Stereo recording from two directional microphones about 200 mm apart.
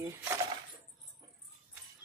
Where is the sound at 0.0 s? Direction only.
15° right (ahead or behind).